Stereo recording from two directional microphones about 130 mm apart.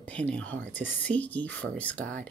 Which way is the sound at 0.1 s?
10° left (ahead or behind).